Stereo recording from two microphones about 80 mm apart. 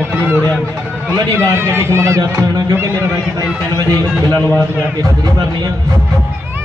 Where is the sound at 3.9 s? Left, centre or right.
Right.